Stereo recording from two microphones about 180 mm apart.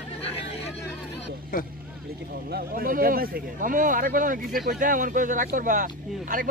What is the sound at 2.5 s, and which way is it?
Speech, 50° right (ahead or behind).